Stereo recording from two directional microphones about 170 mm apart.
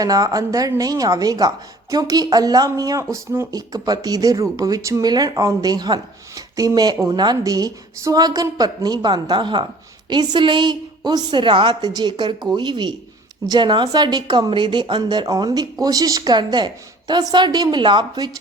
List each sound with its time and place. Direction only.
0.0 s a woman's voice: 20° right (ahead or behind)